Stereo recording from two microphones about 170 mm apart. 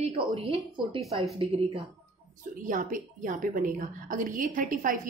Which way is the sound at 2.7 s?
50° right (ahead or behind).